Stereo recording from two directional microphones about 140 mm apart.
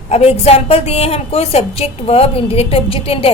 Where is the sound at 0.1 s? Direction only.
50° left (ahead or behind).